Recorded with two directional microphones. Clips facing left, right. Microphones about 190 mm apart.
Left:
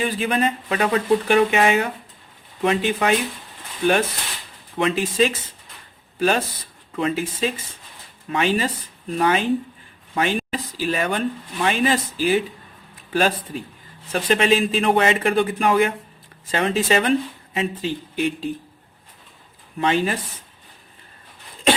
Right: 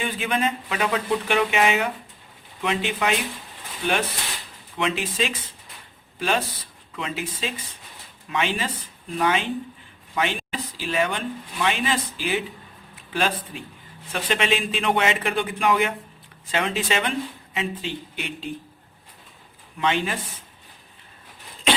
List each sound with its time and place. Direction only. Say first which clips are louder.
0.0 s speech: left 4 dB; 40° left (ahead or behind)
4.8 s speech: left 6 dB; 45° left (ahead or behind)
19.8 s speech: left 4 dB; 40° left (ahead or behind)